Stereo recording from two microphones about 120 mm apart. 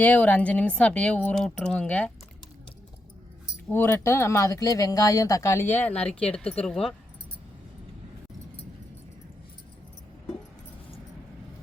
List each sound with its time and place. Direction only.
0.0 s speech: 10° left (ahead or behind)
3.7 s speech: 20° left (ahead or behind)